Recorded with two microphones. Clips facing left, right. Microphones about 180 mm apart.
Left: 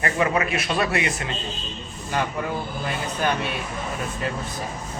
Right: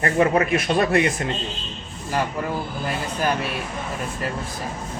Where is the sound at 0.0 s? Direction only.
40° right (ahead or behind).